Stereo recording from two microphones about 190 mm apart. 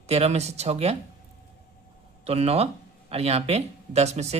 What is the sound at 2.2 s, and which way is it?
A man's voice, 30° right (ahead or behind).